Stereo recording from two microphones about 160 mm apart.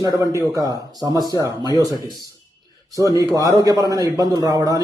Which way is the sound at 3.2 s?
20° left (ahead or behind).